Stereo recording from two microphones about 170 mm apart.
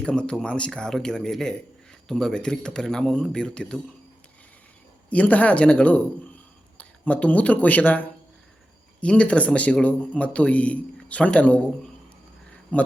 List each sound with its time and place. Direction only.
0.0 s speech: 5° left (ahead or behind)
5.0 s speech: 10° left (ahead or behind)
12.7 s speech: 10° left (ahead or behind)